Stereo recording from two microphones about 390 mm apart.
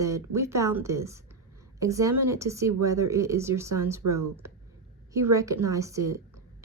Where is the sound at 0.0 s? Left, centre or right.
Centre.